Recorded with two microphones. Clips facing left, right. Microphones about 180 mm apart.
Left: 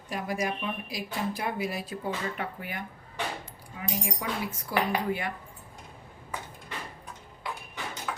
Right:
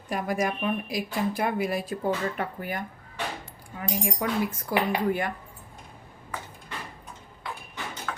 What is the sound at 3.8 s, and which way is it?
Speech, 55° right (ahead or behind).